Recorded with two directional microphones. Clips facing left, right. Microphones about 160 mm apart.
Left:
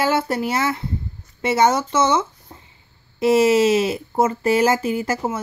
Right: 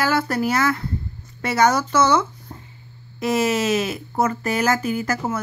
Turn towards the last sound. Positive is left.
turn(degrees=25)  # may be behind; listen again after turning